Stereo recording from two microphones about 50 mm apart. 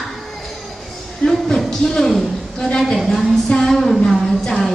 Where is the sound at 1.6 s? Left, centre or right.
Centre.